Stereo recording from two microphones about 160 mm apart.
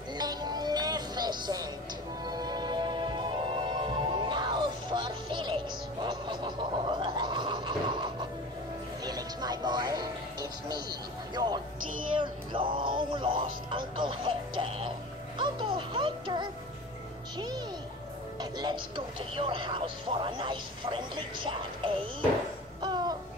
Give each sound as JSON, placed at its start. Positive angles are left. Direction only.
{"t": 0.2, "sound": "music", "side_deg": -25}
{"t": 18.4, "sound": "television", "side_deg": -30}
{"t": 22.8, "sound": "music", "side_deg": -25}